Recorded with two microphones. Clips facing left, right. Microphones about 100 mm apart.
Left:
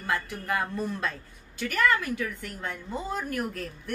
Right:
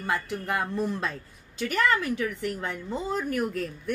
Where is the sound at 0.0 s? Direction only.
20° right (ahead or behind).